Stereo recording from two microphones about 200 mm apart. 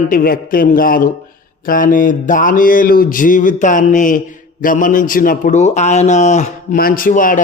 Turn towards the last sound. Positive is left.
turn(degrees=40)  # may be behind; listen again after turning